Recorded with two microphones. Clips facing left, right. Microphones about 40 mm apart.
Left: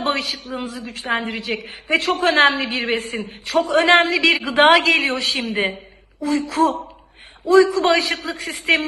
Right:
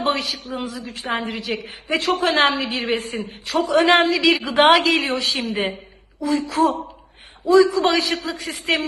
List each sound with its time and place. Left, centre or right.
0.4 s a woman's voice: left
7.4 s a woman's voice: left